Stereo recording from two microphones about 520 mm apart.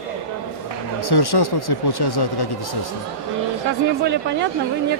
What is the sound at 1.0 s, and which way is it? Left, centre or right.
Speech, left.